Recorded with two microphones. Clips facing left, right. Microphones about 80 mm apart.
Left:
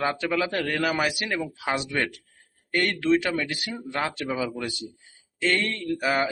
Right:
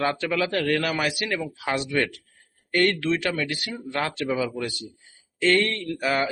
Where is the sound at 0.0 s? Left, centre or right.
Centre.